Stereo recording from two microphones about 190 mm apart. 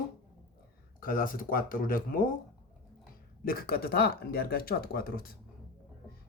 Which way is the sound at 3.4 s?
50° left (ahead or behind).